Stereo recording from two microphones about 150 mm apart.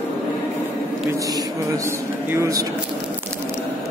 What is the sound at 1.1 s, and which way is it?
Speech, 20° right (ahead or behind).